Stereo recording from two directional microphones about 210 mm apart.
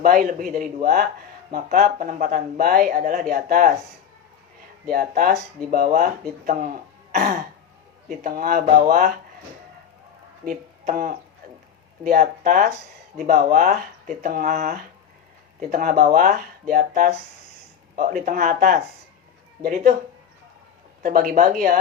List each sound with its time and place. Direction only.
0.0 s speech: 45° right (ahead or behind)
4.9 s speech: 45° right (ahead or behind)
10.4 s speech: 40° right (ahead or behind)
21.0 s speech: 45° right (ahead or behind)